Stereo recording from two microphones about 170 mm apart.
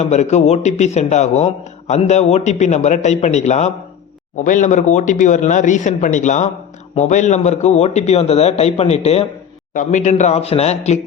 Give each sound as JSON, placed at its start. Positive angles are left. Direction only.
{"t": 0.0, "sound": "a man's voice", "side_deg": 45}